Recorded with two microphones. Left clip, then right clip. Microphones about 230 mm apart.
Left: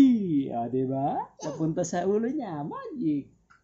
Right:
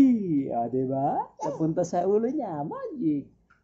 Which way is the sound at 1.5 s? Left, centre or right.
Left.